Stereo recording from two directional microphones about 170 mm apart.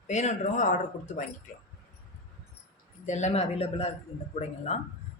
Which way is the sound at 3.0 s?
45° left (ahead or behind).